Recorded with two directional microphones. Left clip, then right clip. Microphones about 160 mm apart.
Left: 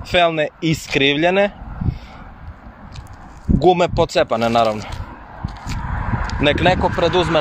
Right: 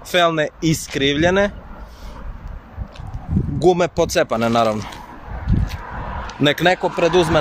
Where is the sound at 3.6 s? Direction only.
Centre (ahead or behind).